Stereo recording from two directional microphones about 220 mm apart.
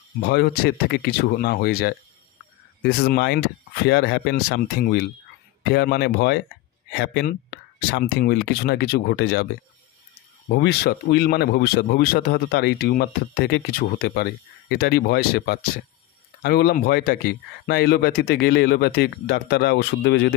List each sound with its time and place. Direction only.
0.2 s speech: 50° left (ahead or behind)
10.5 s speech: 50° left (ahead or behind)